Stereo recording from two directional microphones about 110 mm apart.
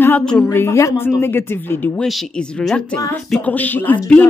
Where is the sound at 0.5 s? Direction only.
25° left (ahead or behind).